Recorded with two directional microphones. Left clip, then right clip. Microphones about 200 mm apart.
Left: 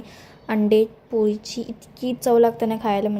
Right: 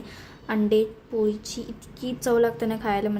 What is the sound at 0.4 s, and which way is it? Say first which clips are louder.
A woman's voice: left 4 dB; 30° left (ahead or behind).